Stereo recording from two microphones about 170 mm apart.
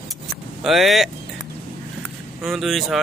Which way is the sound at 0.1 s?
Centre (ahead or behind).